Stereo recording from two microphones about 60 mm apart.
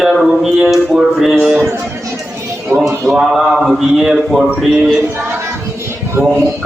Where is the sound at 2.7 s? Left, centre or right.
Right.